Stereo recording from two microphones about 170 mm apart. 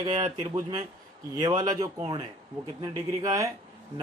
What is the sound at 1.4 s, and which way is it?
Speech, 25° right (ahead or behind).